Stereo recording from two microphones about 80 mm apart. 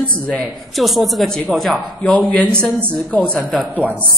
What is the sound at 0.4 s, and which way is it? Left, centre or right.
A woman's voice, centre.